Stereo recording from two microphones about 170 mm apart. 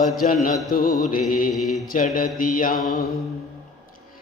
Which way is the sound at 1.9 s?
55° left (ahead or behind).